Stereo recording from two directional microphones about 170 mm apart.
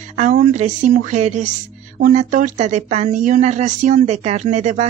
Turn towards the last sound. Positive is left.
turn(degrees=-45)  # may be behind; listen again after turning